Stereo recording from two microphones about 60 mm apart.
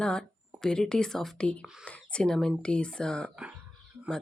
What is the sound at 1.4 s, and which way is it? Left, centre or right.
Speech, left.